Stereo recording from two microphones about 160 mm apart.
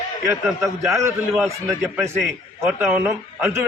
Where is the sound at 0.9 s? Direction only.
15° right (ahead or behind).